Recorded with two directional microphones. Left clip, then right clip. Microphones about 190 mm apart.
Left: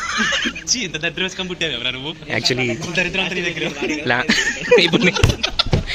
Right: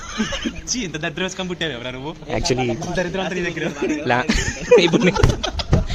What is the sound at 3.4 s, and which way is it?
Speech, 55° right (ahead or behind).